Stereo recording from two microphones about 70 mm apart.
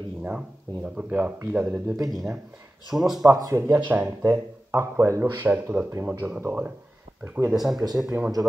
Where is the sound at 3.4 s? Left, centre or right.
Right.